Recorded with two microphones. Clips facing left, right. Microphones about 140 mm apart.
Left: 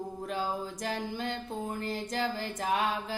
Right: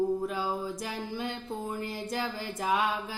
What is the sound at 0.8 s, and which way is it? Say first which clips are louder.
Music: left 1 dB; 45° left (ahead or behind).